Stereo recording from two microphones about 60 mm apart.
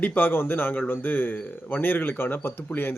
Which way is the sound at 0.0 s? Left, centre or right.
Left.